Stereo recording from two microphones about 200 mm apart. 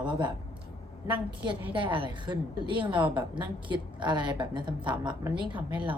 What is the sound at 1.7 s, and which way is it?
A woman's voice, 25° right (ahead or behind).